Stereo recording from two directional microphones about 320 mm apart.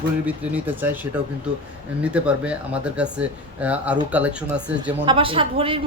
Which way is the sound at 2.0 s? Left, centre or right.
Centre.